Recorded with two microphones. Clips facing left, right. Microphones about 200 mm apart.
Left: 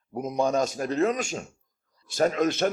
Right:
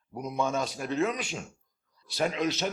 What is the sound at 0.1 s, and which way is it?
A man's voice, 45° left (ahead or behind).